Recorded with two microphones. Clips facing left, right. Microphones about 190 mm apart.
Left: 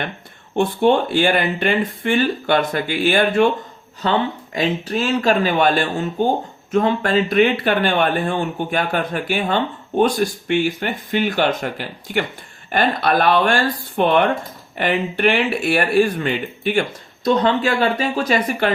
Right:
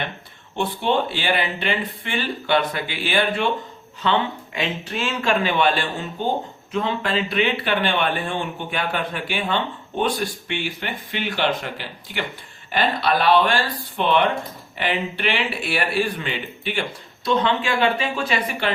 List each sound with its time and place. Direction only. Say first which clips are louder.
0.5 s speech: left 6 dB; 45° left (ahead or behind)